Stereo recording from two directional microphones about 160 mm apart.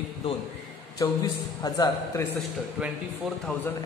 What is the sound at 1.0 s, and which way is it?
A man's voice, 20° left (ahead or behind).